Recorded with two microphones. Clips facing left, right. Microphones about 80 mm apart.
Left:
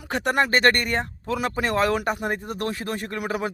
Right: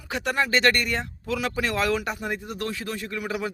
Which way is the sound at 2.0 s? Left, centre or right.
Left.